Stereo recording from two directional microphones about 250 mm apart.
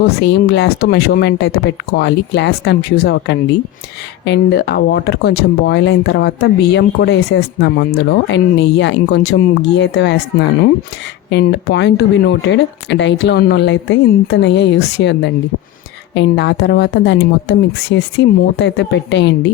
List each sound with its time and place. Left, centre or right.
0.2 s speech: left
11.3 s speech: left